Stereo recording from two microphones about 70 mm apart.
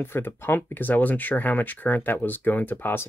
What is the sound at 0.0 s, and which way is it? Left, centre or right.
Speech, left.